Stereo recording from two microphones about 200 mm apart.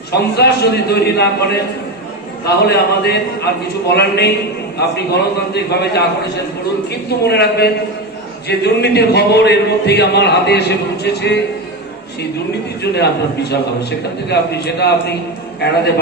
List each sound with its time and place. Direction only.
0.1 s a man's voice: 55° left (ahead or behind)
12.9 s a man's voice: 55° left (ahead or behind)